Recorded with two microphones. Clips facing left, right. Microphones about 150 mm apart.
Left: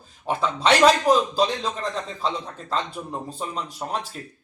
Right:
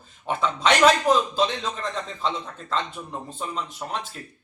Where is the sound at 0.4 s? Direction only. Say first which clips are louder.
Left 1 dB; 35° left (ahead or behind).